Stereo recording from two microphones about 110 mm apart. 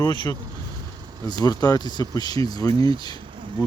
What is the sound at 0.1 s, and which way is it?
Speech, 45° left (ahead or behind).